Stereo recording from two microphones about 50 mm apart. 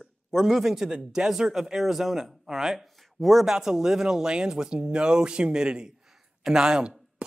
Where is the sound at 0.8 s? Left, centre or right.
Centre.